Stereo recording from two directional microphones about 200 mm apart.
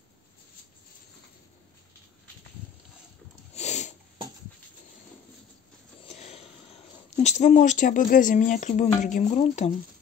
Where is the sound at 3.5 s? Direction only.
35° left (ahead or behind).